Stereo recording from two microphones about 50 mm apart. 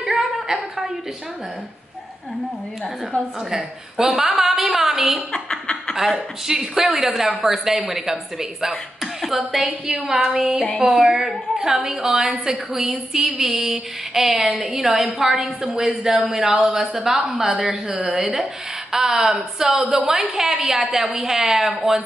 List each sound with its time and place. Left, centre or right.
0.0 s a sound: centre
3.4 s a woman's voice: centre
5.3 s snicker: centre
6.1 s a woman's voice: centre
14.4 s a woman's voice: right
15.1 s a woman's voice: centre
17.5 s a woman's voice: right
18.0 s a woman's voice: centre